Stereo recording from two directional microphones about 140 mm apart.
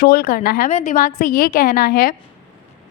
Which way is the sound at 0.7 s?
70° left (ahead or behind).